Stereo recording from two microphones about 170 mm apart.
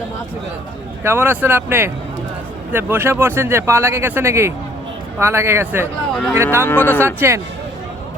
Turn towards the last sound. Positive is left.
turn(degrees=-15)  # may be behind; listen again after turning